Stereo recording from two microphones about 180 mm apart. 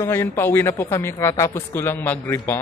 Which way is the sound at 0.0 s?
15° left (ahead or behind).